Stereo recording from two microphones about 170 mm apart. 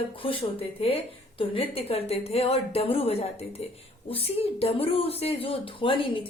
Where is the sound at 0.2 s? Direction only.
30° left (ahead or behind).